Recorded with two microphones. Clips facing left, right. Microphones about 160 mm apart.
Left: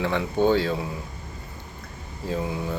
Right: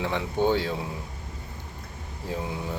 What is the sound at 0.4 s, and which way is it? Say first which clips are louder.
Speech: left 3 dB; 15° right (ahead or behind).